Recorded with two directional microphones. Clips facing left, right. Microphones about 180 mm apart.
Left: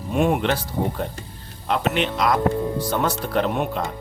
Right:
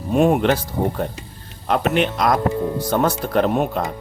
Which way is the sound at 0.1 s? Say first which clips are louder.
Right 4 dB; 40° right (ahead or behind).